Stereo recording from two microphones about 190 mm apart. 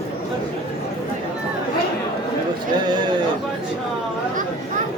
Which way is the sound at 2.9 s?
25° right (ahead or behind).